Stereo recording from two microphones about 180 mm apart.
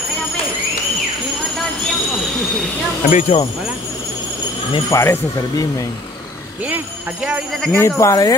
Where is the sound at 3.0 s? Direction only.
35° left (ahead or behind).